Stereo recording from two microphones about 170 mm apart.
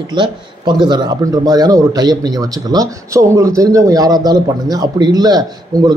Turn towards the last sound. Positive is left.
turn(degrees=-20)  # may be behind; listen again after turning